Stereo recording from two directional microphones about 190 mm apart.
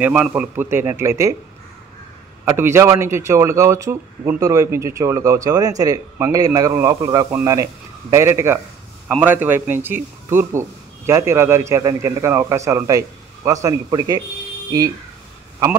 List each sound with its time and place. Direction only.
0.0 s speech: 10° right (ahead or behind)
2.4 s speech: 15° right (ahead or behind)